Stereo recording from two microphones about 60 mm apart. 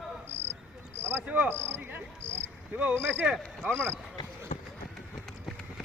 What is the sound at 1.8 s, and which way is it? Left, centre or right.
Cricket, right.